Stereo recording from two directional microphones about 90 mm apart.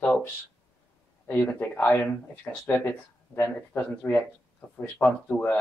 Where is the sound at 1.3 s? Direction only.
20° left (ahead or behind).